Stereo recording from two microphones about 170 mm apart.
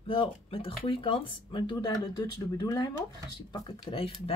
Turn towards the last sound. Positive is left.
turn(degrees=35)  # may be behind; listen again after turning